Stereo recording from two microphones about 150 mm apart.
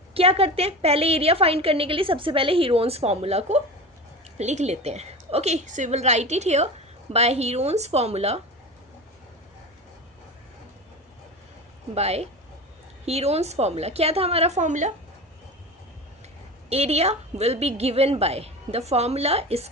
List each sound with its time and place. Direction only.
0.1 s a woman's voice: 40° right (ahead or behind)
11.9 s a woman's voice: 45° right (ahead or behind)
16.6 s a woman's voice: 45° right (ahead or behind)